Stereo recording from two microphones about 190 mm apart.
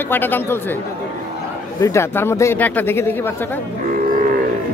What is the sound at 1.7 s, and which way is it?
Speech, 15° left (ahead or behind).